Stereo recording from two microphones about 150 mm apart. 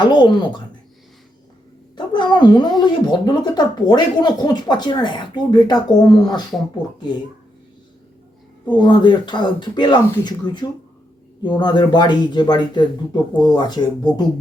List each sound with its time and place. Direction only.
0.0 s speech: 30° left (ahead or behind)
2.0 s speech: 30° left (ahead or behind)
8.8 s speech: 30° left (ahead or behind)